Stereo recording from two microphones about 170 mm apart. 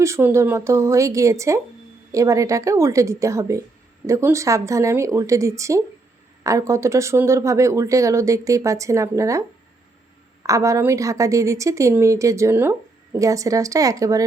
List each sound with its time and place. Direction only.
0.0 s a woman's voice: 15° right (ahead or behind)
10.4 s a woman's voice: 20° right (ahead or behind)